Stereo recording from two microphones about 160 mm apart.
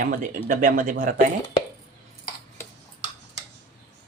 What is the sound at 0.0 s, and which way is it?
Speech, 60° right (ahead or behind).